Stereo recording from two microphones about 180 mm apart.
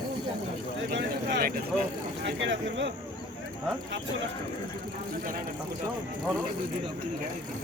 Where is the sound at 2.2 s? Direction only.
80° right.